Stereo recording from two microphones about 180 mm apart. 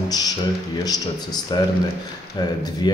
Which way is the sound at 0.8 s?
20° left (ahead or behind).